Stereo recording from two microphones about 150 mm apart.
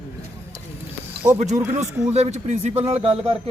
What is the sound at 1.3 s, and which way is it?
A man's voice, 50° right (ahead or behind).